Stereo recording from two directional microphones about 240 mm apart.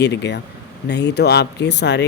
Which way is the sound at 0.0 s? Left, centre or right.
Left.